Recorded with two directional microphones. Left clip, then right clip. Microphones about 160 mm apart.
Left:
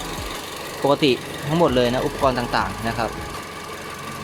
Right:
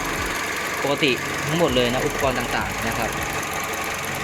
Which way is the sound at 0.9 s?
25° left (ahead or behind).